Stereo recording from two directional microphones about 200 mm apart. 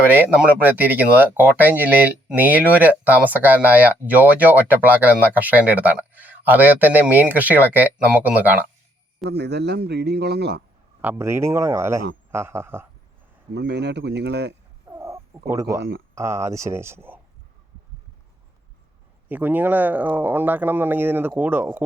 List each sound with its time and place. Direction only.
0.1 s speech: 10° right (ahead or behind)
9.3 s a man's voice: 55° right (ahead or behind)
11.0 s speech: 10° right (ahead or behind)
13.5 s a man's voice: 55° right (ahead or behind)
14.8 s wild animals: 15° right (ahead or behind)
16.1 s speech: 15° right (ahead or behind)
19.3 s speech: 10° right (ahead or behind)